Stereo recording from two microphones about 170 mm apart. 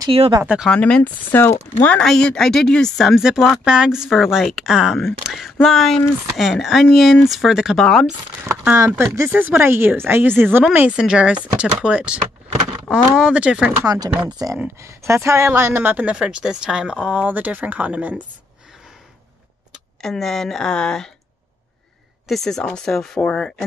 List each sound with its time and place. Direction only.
0.1 s speech: 35° right (ahead or behind)
0.4 s speech: 5° right (ahead or behind)
0.7 s speech: 5° left (ahead or behind)
8.5 s speech: 15° right (ahead or behind)
13.8 s speech: 20° right (ahead or behind)
20.0 s speech: centre (ahead or behind)
22.3 s speech: centre (ahead or behind)